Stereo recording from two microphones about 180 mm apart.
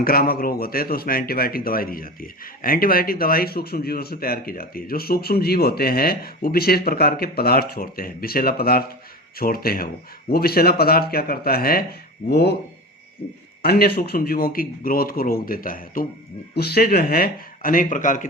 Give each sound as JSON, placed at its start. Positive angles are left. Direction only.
{"t": 0.0, "sound": "speech", "side_deg": 55}
{"t": 13.2, "sound": "hoot", "side_deg": 35}
{"t": 13.6, "sound": "speech", "side_deg": 60}